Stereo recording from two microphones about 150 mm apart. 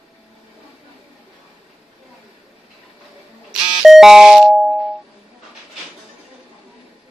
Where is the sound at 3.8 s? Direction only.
5° right (ahead or behind).